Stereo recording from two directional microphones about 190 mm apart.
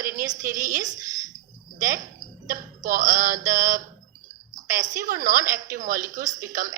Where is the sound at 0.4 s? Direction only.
45° right (ahead or behind).